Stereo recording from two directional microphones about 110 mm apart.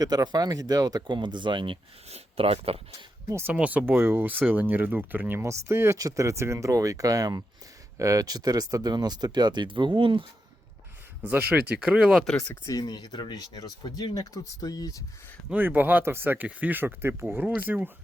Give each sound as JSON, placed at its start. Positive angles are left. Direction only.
{"t": 0.0, "sound": "speech", "side_deg": -35}
{"t": 2.0, "sound": "speech", "side_deg": -65}
{"t": 3.4, "sound": "speech", "side_deg": -15}
{"t": 11.2, "sound": "speech", "side_deg": -15}
{"t": 12.2, "sound": "speech", "side_deg": 5}
{"t": 12.6, "sound": "speech", "side_deg": 35}
{"t": 15.4, "sound": "speech", "side_deg": -15}